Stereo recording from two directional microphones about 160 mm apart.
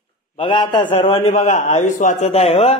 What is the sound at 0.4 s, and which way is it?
A man's voice, 30° left (ahead or behind).